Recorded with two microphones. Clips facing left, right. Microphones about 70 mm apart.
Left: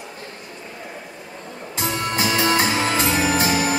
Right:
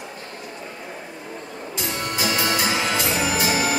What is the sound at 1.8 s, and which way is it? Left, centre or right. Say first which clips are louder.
Music: left 3 dB; left.